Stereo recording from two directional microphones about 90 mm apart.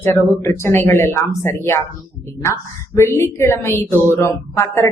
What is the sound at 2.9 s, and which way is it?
Speech, 30° left (ahead or behind).